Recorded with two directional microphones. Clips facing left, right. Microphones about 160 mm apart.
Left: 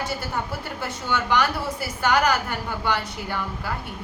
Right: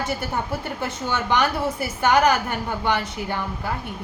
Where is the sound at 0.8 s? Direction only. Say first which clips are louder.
Left 2 dB; 20° right (ahead or behind).